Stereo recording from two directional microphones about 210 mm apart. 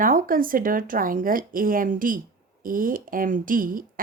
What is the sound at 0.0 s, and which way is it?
A woman's voice, 40° right (ahead or behind).